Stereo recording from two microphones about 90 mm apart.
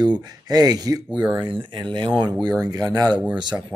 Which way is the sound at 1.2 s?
60° right (ahead or behind).